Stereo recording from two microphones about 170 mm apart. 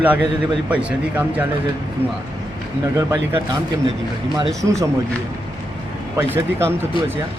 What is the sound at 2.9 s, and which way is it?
Speech, 20° right (ahead or behind).